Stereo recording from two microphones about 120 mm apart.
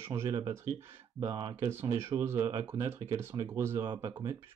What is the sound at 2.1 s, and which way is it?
Speech, 20° right (ahead or behind).